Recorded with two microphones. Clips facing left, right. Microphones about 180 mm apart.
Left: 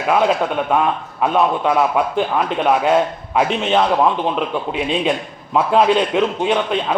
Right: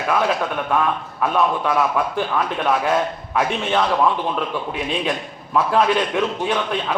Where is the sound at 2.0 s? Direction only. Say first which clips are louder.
Left 3 dB; 20° left (ahead or behind).